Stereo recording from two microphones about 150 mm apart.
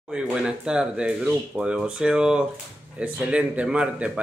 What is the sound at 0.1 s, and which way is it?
Speech, 5° right (ahead or behind).